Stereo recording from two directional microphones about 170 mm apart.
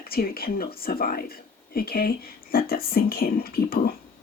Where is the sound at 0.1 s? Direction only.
60° left (ahead or behind).